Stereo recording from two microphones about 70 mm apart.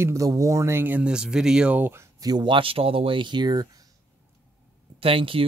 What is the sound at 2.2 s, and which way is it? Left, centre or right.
Speech, right.